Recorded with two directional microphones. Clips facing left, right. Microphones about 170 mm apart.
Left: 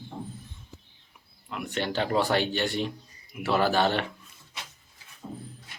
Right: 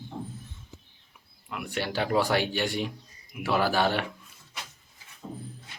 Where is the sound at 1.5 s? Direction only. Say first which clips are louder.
Left 1 dB; 10° right (ahead or behind).